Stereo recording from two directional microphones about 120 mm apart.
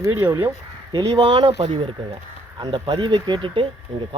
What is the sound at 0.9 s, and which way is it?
Speech, 35° right (ahead or behind).